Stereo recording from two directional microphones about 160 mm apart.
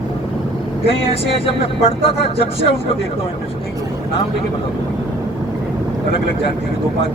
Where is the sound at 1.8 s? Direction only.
40° left (ahead or behind).